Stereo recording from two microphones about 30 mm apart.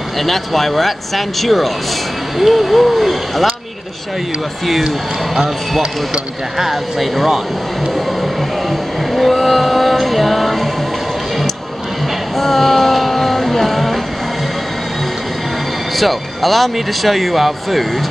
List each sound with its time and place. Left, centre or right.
0.2 s speech: centre
4.8 s speech: right
6.6 s speech: centre
8.2 s music: centre
12.4 s vehicle: centre
16.0 s speech: centre